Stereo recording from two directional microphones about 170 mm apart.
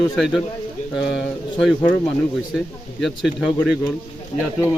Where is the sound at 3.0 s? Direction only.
Centre (ahead or behind).